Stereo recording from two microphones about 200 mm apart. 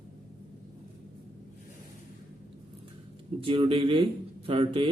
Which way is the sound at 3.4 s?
25° right (ahead or behind).